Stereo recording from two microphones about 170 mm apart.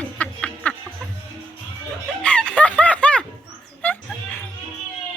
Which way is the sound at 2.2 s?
5° left (ahead or behind).